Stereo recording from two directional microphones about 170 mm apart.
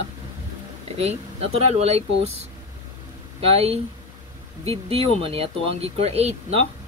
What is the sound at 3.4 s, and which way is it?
Speech, 35° right (ahead or behind).